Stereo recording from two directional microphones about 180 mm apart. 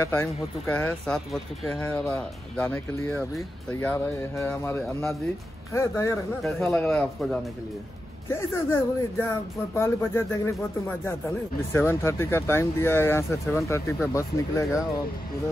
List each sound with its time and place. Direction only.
0.0 s speech: 10° left (ahead or behind)
6.4 s speech: centre (ahead or behind)
8.3 s speech: 15° left (ahead or behind)